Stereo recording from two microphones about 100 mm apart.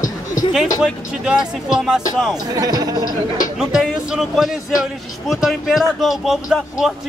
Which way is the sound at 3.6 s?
5° right (ahead or behind).